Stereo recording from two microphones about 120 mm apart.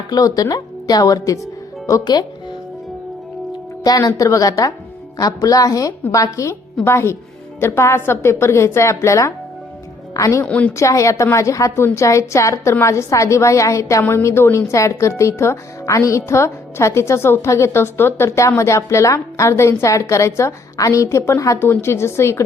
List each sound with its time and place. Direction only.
0.1 s a woman's voice: 30° left (ahead or behind)
3.8 s a woman's voice: 30° left (ahead or behind)
10.4 s a woman's voice: 10° left (ahead or behind)
10.8 s a woman's voice: 25° left (ahead or behind)